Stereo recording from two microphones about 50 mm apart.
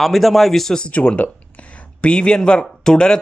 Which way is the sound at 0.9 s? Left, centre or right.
Left.